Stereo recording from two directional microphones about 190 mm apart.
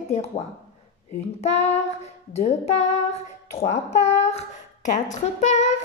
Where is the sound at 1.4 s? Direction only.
35° left (ahead or behind).